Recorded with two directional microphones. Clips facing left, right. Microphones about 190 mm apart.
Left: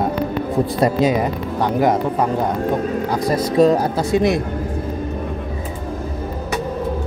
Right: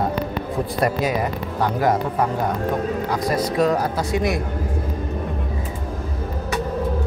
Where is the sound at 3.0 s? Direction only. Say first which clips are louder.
Left 3 dB; 30° left (ahead or behind).